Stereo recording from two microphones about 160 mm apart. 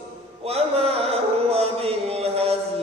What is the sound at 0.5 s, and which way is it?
Music, 40° right (ahead or behind).